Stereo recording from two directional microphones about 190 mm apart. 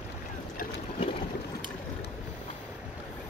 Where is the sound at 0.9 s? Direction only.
30° left (ahead or behind).